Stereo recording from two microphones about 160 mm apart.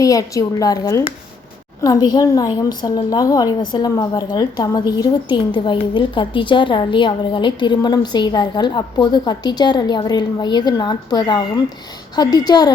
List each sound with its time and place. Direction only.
0.0 s a woman's voice: 20° left (ahead or behind)